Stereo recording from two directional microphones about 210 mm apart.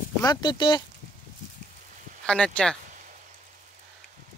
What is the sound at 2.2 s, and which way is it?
Speech, 5° left (ahead or behind).